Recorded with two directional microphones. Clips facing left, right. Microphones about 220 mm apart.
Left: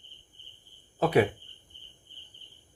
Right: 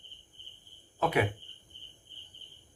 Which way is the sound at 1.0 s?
35° left (ahead or behind).